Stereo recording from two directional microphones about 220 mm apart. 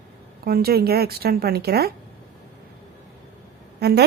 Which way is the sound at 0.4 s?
45° right (ahead or behind).